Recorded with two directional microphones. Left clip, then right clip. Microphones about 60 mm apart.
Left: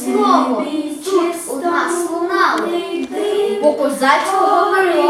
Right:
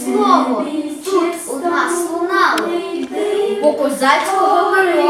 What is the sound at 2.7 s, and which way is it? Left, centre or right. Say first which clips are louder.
Child singing: even; left.